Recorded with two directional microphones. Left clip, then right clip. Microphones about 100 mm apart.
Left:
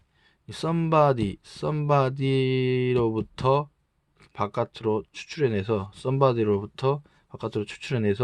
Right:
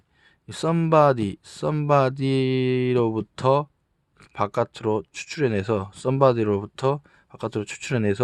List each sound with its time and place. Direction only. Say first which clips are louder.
0.3 s speech: right 4 dB; 40° right (ahead or behind)